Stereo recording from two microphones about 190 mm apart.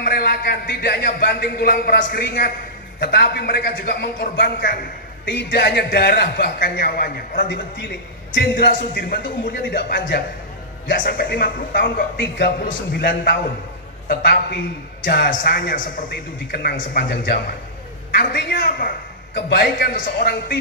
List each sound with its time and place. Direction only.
0.0 s a man's voice: 55° left (ahead or behind)
8.5 s a man's voice: 50° left (ahead or behind)
19.3 s a man's voice: 60° left (ahead or behind)